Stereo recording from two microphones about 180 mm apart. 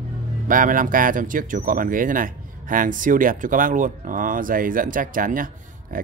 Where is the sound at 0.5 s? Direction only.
50° right (ahead or behind).